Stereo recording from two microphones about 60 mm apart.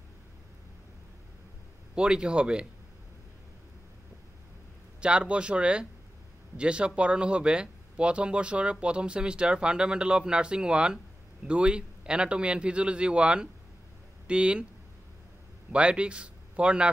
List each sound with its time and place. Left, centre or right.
2.0 s speech: centre
5.0 s speech: centre
15.7 s speech: centre